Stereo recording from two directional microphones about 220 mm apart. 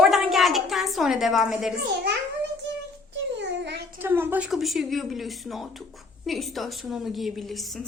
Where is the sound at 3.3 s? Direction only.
50° right (ahead or behind).